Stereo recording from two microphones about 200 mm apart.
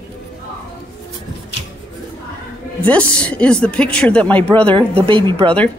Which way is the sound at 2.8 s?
5° left (ahead or behind).